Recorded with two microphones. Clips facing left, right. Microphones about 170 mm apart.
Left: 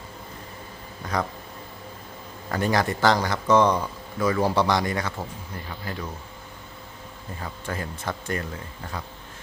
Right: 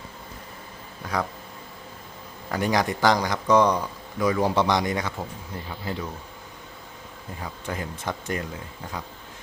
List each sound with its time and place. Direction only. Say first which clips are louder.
1.1 s speech: even; 10° right (ahead or behind)
2.5 s speech: even; 15° right (ahead or behind)
7.4 s speech: even; 15° right (ahead or behind)